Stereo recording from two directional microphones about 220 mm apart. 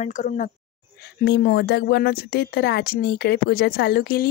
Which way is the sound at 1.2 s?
50° left (ahead or behind).